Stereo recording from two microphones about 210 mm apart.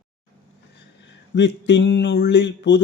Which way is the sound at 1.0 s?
55° left (ahead or behind).